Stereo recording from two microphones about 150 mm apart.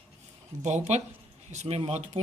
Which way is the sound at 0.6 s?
50° right (ahead or behind).